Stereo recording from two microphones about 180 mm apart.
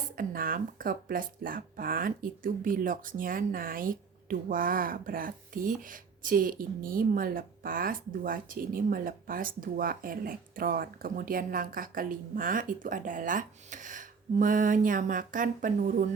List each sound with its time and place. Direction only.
0.2 s speech: 50° right (ahead or behind)